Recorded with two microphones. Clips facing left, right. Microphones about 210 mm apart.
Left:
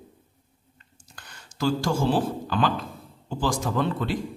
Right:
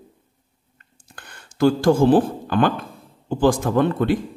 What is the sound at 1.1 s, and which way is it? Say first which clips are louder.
Speech: right 4 dB; 55° right (ahead or behind).